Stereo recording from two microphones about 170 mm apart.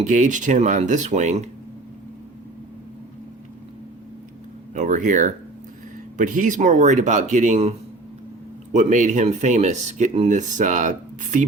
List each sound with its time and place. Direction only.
0.0 s speech: 50° right (ahead or behind)
4.7 s speech: 45° right (ahead or behind)
8.7 s speech: 45° right (ahead or behind)